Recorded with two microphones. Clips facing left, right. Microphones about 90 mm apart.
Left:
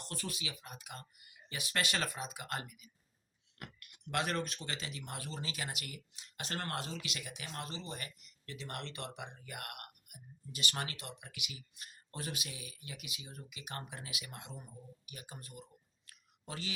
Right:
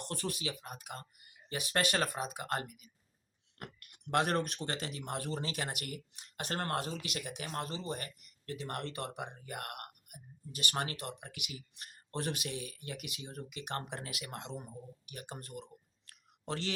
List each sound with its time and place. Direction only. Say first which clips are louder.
0.0 s speech: right 5 dB; 50° right (ahead or behind)
6.5 s speech: right 4 dB; 35° right (ahead or behind)
6.7 s speech: right 4 dB; 45° right (ahead or behind)
14.3 s speech: right 6 dB; 65° right (ahead or behind)
15.1 s a sound: right 6 dB; 60° right (ahead or behind)